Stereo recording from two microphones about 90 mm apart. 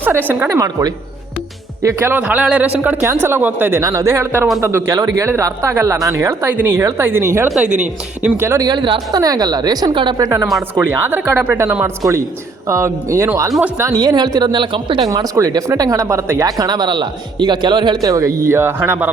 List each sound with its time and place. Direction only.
0.0 s speech: 20° right (ahead or behind)
0.4 s speech: 40° right (ahead or behind)
1.8 s speech: 30° right (ahead or behind)
2.2 s speech: 15° right (ahead or behind); by 4.9 s 30° right (ahead or behind)
4.9 s speech: 40° right (ahead or behind)
7.5 s speech: 10° right (ahead or behind)
8.4 s speech: 30° right (ahead or behind)
8.6 s a woman's voice: 60° right (ahead or behind)
9.2 s a woman's voice: 45° right (ahead or behind)
9.9 s a woman's voice: 65° right (ahead or behind)
10.8 s speech: 25° right (ahead or behind)
13.9 s a woman's voice: 50° right (ahead or behind); by 15.0 s 70° right (ahead or behind)
15.0 s speech: 40° right (ahead or behind); by 19.1 s 20° right (ahead or behind)